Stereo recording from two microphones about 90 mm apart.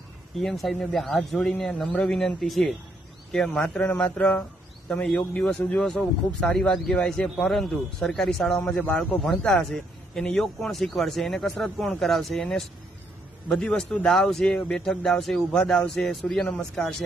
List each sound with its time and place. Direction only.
0.3 s a man's voice: centre (ahead or behind)